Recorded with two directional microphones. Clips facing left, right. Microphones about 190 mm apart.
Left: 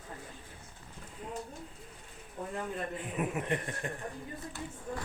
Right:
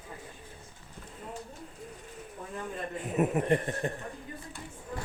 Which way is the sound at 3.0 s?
40° right (ahead or behind).